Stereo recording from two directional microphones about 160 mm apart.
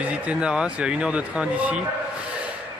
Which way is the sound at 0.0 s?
5° right (ahead or behind).